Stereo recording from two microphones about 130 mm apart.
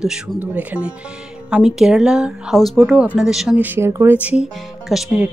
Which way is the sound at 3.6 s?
15° right (ahead or behind).